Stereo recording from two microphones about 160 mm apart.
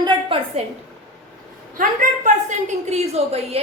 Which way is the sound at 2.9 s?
40° right (ahead or behind).